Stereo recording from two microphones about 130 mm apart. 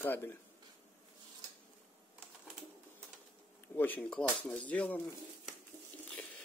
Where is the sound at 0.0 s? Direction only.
15° left (ahead or behind).